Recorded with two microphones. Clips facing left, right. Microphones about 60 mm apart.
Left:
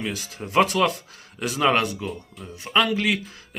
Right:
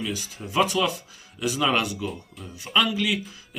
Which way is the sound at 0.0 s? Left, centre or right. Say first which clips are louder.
Left 1 dB; left.